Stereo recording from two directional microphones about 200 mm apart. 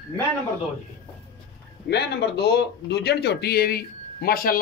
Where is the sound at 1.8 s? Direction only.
55° left (ahead or behind).